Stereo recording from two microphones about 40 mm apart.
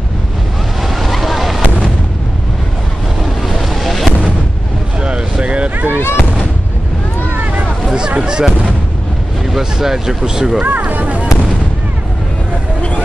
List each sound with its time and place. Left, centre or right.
0.8 s waves: centre
3.4 s boat: centre
5.0 s a sound: right
5.9 s fireworks: left
8.2 s a sound: right
9.5 s speech: centre
10.6 s speech: right